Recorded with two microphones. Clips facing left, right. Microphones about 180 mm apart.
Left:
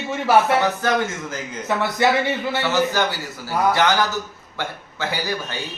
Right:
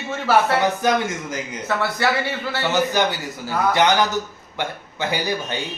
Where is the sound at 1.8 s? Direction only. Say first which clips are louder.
Left 3 dB; 20° left (ahead or behind).